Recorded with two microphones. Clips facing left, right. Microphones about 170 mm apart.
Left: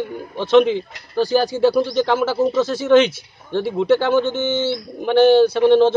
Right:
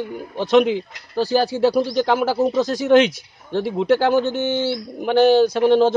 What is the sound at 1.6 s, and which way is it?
Speech, 35° right (ahead or behind).